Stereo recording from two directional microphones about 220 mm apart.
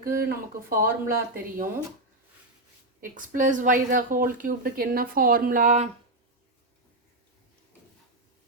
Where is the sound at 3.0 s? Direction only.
35° right (ahead or behind).